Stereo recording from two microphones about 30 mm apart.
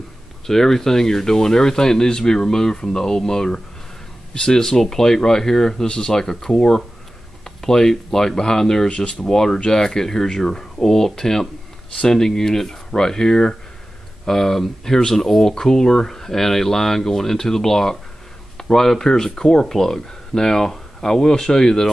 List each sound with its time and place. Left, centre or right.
0.5 s speech: centre
8.8 s speech: left
9.3 s speech: centre